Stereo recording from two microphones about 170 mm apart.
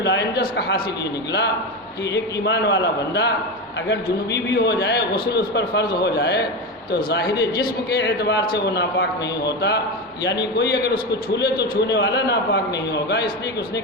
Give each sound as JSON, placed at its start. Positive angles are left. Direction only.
{"t": 0.0, "sound": "a man's voice", "side_deg": 85}
{"t": 2.1, "sound": "a man's voice", "side_deg": 90}